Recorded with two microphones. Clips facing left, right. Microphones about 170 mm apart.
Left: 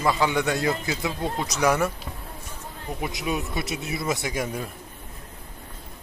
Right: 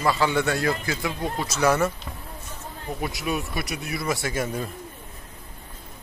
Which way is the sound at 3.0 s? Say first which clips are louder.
Even; 20° left (ahead or behind).